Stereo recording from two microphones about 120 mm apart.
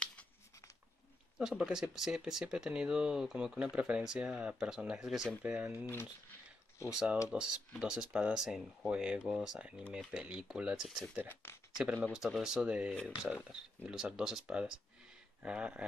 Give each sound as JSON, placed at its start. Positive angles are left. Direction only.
{"t": 0.0, "sound": "a sound", "side_deg": 10}
{"t": 1.4, "sound": "speech", "side_deg": -5}
{"t": 7.2, "sound": "speech", "side_deg": -5}
{"t": 11.2, "sound": "speech", "side_deg": 20}
{"t": 12.1, "sound": "speech", "side_deg": -5}